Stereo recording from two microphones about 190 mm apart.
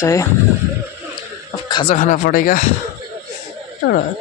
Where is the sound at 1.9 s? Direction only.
40° left (ahead or behind).